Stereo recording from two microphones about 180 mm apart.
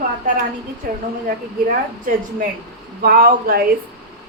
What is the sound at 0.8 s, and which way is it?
A woman's voice, 55° right (ahead or behind).